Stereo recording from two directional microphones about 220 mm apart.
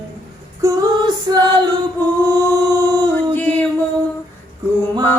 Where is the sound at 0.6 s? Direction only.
15° right (ahead or behind).